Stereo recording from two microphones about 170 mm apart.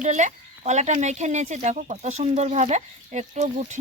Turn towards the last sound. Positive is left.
turn(degrees=-45)  # may be behind; listen again after turning